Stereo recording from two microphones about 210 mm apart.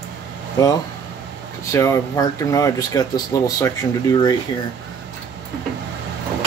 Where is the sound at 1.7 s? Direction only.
15° left (ahead or behind).